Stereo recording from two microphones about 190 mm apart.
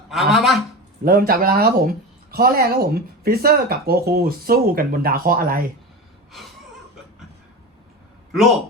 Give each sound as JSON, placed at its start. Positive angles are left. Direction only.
{"t": 0.1, "sound": "speech", "side_deg": 0}
{"t": 1.0, "sound": "a woman's voice", "side_deg": -50}
{"t": 8.3, "sound": "speech", "side_deg": 0}